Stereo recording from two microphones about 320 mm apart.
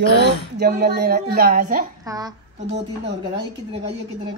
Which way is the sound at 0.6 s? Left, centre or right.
Right.